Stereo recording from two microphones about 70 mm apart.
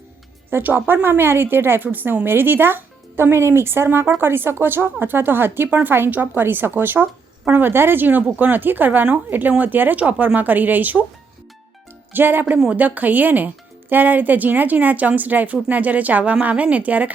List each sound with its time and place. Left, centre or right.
0.5 s speech: right
12.1 s speech: right